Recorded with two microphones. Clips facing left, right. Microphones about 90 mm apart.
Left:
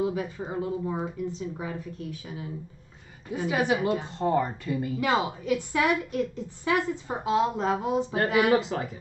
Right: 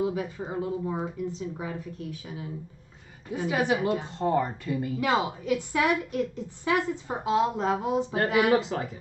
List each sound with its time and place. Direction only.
0.0 s a woman's voice: 10° right (ahead or behind)
3.4 s speech: 10° left (ahead or behind)
5.0 s a woman's voice: 15° right (ahead or behind)
8.5 s speech: 10° left (ahead or behind)